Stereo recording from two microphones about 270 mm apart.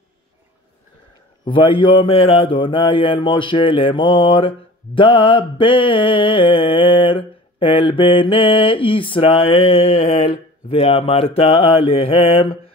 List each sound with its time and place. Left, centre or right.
1.4 s speech: centre